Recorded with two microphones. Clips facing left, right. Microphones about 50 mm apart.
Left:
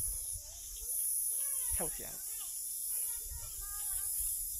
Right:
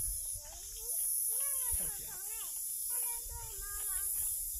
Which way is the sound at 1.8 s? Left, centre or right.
Left.